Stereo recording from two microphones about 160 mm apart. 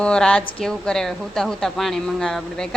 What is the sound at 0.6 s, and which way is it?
Speech, 5° left (ahead or behind).